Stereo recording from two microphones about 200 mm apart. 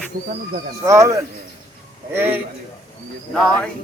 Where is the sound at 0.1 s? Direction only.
45° right (ahead or behind).